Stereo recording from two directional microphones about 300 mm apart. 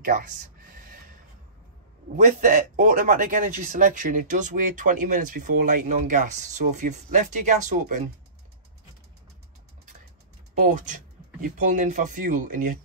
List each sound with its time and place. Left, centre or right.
0.0 s a sound: right
2.1 s a man's voice: right
10.5 s a man's voice: right